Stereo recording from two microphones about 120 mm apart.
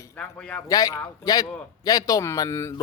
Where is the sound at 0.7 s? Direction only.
30° left (ahead or behind).